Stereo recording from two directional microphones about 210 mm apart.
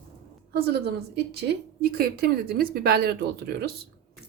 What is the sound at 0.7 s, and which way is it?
A woman's voice, 50° right (ahead or behind).